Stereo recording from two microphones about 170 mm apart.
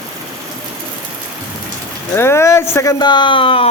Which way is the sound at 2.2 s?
15° left (ahead or behind).